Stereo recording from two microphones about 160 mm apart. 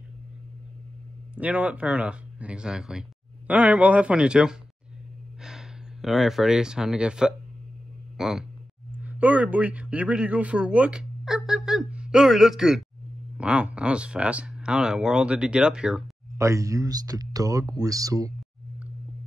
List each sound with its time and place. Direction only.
1.3 s a man's voice: 10° right (ahead or behind)
16.3 s speech: 20° right (ahead or behind)